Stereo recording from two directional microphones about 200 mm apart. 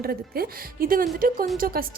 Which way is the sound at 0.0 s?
50° right (ahead or behind).